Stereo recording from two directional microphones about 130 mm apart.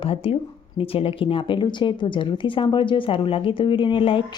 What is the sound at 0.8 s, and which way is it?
Music, 45° left (ahead or behind).